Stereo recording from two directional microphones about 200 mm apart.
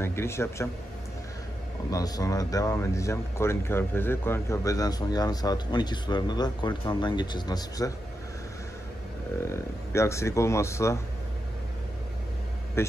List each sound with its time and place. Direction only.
0.0 s speech: 10° left (ahead or behind)
1.9 s speech: 20° left (ahead or behind)
9.4 s speech: 15° left (ahead or behind)
12.8 s a man's voice: 10° left (ahead or behind)